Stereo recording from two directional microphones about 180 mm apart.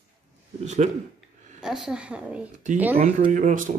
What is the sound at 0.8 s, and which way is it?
Speech, 40° right (ahead or behind).